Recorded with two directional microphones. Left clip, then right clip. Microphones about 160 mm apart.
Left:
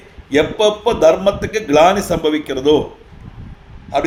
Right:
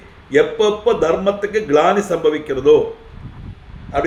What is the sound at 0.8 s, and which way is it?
Speech, 50° left (ahead or behind).